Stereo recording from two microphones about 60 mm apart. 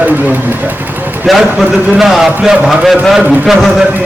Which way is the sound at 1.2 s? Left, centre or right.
Centre.